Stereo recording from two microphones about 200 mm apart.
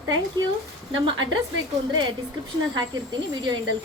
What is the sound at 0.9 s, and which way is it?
Speech, 70° right (ahead or behind).